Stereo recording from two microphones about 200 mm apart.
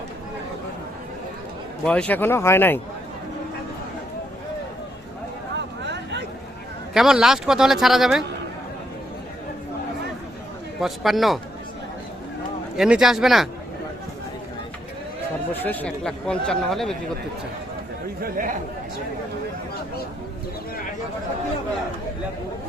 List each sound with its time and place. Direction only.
1.8 s speech: 5° left (ahead or behind)
5.5 s a sound: 60° right (ahead or behind)
6.9 s speech: centre (ahead or behind)
10.8 s speech: centre (ahead or behind)
12.7 s speech: 5° right (ahead or behind)
15.6 s speech: 10° left (ahead or behind)
18.2 s speech: 45° right (ahead or behind)